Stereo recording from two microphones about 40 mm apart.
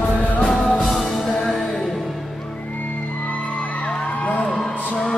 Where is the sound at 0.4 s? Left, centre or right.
Centre.